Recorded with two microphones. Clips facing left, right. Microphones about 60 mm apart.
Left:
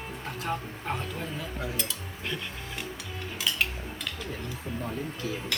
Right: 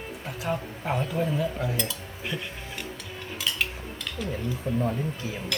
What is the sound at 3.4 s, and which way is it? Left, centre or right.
Music, centre.